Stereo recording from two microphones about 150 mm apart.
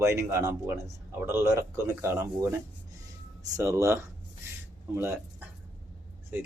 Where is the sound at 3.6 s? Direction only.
20° right (ahead or behind).